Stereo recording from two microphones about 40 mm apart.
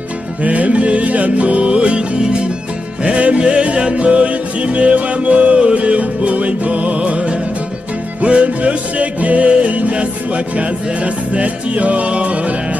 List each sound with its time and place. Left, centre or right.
0.4 s music: right